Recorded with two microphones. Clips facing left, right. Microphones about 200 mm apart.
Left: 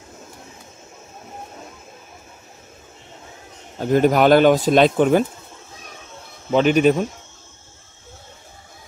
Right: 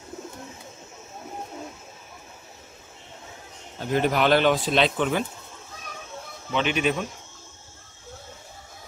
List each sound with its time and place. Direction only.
3.7 s speech: 45° left (ahead or behind)
6.5 s speech: 40° left (ahead or behind)